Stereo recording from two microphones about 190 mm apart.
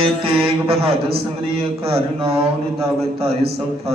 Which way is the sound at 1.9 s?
30° right (ahead or behind).